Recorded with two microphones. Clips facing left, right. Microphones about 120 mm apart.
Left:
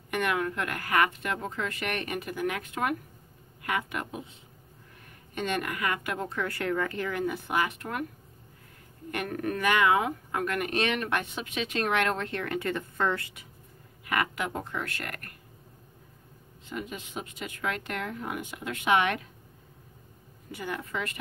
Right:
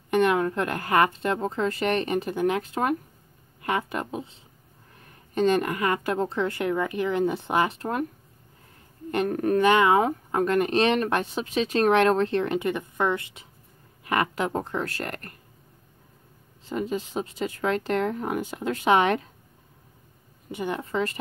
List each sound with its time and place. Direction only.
0.1 s a woman's voice: 30° right (ahead or behind)
9.1 s speech: 30° right (ahead or behind)
16.6 s speech: 30° right (ahead or behind)
20.5 s a woman's voice: 25° right (ahead or behind)